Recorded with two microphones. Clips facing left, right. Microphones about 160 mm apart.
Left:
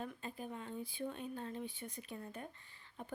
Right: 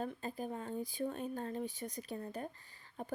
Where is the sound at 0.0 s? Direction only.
40° right (ahead or behind).